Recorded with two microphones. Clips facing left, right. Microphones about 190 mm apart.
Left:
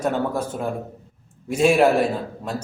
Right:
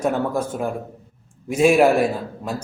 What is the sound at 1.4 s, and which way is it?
Speech, 5° right (ahead or behind).